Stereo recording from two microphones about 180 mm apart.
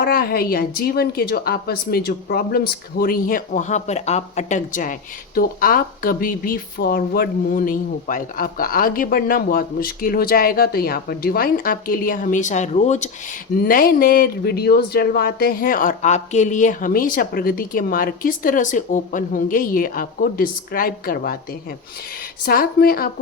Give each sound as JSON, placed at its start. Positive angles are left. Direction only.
{"t": 0.0, "sound": "a woman's voice", "side_deg": 55}
{"t": 13.6, "sound": "a woman's voice", "side_deg": 50}
{"t": 22.4, "sound": "a woman's voice", "side_deg": 55}